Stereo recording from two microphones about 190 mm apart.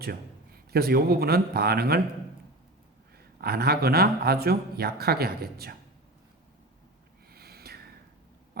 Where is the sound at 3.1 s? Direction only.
55° right (ahead or behind).